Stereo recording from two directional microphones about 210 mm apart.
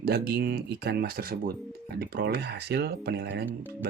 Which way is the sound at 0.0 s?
45° right (ahead or behind).